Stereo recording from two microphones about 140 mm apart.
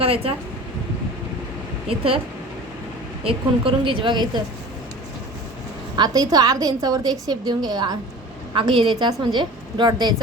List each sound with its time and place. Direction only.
0.0 s speech: 45° right (ahead or behind)
1.9 s a woman's voice: 40° right (ahead or behind)
3.2 s a woman's voice: 40° right (ahead or behind)
6.0 s a woman's voice: 25° right (ahead or behind)